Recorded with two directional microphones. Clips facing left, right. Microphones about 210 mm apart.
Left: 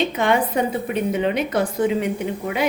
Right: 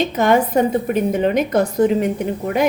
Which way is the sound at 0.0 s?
45° right (ahead or behind).